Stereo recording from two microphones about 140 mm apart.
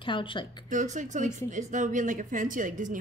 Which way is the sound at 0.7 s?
60° right (ahead or behind).